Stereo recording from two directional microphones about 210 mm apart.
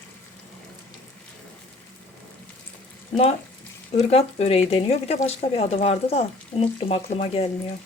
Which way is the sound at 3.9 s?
30° left (ahead or behind).